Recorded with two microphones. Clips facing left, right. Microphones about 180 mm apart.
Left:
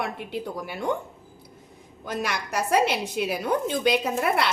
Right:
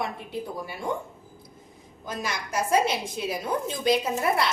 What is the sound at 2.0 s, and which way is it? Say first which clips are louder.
A woman's voice: left 3 dB; 65° left (ahead or behind).